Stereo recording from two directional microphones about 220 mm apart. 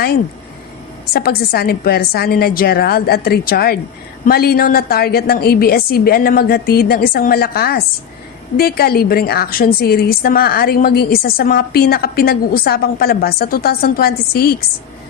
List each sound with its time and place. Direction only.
1.1 s a woman's voice: 45° left (ahead or behind)